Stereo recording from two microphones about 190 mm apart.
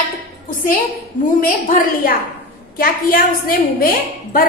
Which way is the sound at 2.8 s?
50° left (ahead or behind).